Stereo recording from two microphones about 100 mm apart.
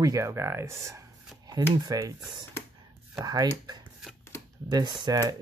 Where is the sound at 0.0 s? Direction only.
30° right (ahead or behind).